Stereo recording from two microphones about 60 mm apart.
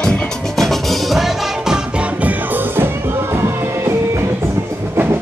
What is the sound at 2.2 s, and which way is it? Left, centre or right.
Music, right.